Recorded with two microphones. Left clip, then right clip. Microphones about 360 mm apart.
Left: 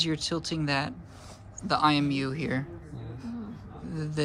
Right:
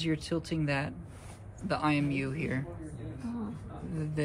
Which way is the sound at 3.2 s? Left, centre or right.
Left.